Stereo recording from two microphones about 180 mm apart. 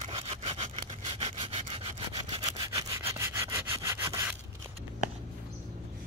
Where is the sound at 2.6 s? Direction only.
20° right (ahead or behind).